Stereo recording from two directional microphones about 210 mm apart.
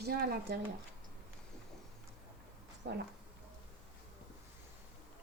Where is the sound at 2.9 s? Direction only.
55° right (ahead or behind).